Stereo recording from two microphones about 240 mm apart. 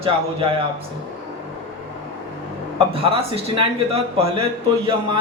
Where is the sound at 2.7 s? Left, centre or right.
Right.